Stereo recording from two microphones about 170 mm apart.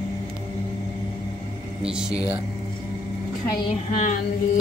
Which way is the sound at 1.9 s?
5° right (ahead or behind).